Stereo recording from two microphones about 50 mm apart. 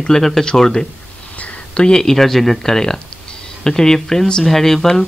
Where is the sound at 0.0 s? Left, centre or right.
Centre.